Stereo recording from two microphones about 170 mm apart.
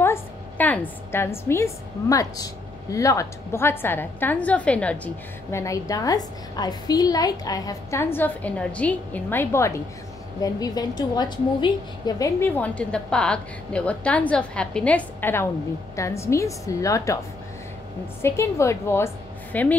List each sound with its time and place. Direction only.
0.0 s a woman's voice: 10° left (ahead or behind)
18.2 s a woman's voice: 15° left (ahead or behind)